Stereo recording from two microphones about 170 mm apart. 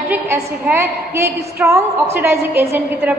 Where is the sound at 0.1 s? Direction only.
10° right (ahead or behind).